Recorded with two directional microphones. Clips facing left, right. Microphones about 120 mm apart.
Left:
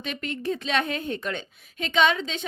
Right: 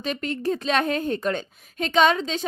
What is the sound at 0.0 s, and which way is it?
Speech, 40° right (ahead or behind).